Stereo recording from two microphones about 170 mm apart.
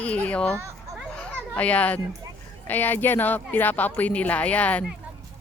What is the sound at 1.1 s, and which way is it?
Children playing, 5° left (ahead or behind).